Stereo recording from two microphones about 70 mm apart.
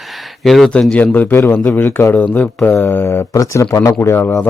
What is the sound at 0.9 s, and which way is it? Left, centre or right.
Speech, left.